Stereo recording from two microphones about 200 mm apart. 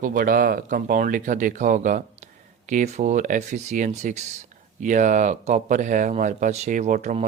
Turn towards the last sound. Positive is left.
turn(degrees=-40)  # may be behind; listen again after turning